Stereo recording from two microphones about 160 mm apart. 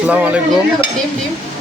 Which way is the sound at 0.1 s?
10° right (ahead or behind).